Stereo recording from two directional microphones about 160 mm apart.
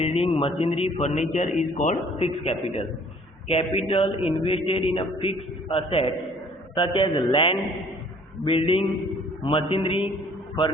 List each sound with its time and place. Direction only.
0.0 s a man's voice: 40° left (ahead or behind)